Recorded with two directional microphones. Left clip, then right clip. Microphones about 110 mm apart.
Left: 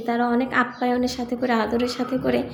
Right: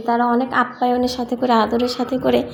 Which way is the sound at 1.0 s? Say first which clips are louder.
Right 5 dB; 30° right (ahead or behind).